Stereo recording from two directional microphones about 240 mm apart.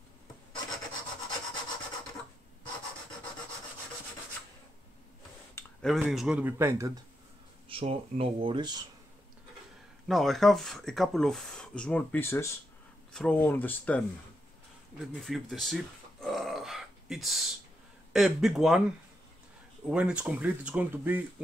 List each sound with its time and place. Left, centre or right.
5.5 s speech: centre
7.6 s speech: right
10.0 s speech: centre
15.2 s a sound: centre
18.1 s speech: centre